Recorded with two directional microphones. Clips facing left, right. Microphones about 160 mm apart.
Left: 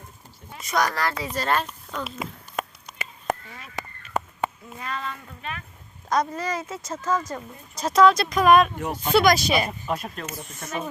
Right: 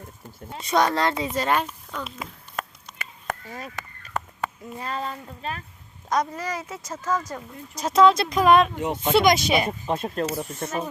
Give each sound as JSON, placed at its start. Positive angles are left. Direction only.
{"t": 0.5, "sound": "speech", "side_deg": -30}
{"t": 1.9, "sound": "a sound", "side_deg": 10}
{"t": 3.5, "sound": "a sound", "side_deg": -40}
{"t": 4.8, "sound": "speech", "side_deg": -35}
{"t": 6.1, "sound": "speech", "side_deg": -15}
{"t": 7.8, "sound": "speech", "side_deg": -25}